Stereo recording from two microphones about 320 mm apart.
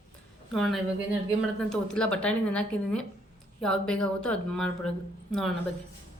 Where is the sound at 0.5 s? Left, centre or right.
Centre.